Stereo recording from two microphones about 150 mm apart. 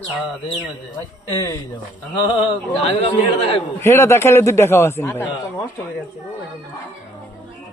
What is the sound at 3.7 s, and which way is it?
A man's voice, 15° left (ahead or behind).